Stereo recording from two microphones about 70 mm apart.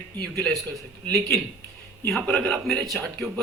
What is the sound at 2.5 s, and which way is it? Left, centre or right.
Speech, centre.